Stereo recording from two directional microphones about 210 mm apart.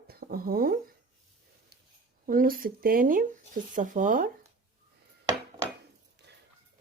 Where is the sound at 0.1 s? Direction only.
45° right (ahead or behind).